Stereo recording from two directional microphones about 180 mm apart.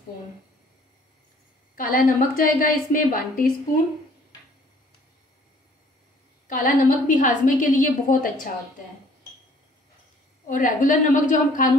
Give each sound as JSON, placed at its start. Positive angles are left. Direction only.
{"t": 1.8, "sound": "a woman's voice", "side_deg": 50}
{"t": 6.4, "sound": "a woman's voice", "side_deg": 45}
{"t": 10.5, "sound": "a woman's voice", "side_deg": 45}